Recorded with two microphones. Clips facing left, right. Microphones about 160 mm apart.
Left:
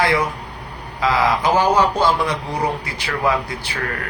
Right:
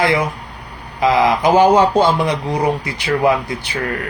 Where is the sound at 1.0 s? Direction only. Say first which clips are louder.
Right 4 dB; 20° right (ahead or behind).